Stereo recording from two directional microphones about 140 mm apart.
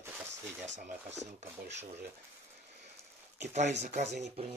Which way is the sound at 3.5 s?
55° right (ahead or behind).